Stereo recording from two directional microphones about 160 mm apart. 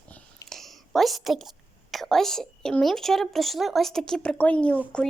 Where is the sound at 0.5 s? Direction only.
Centre (ahead or behind).